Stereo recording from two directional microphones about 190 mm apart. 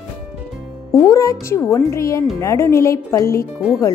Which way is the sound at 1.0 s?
15° left (ahead or behind).